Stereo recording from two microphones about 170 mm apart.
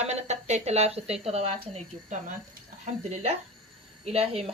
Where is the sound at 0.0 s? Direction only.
40° right (ahead or behind).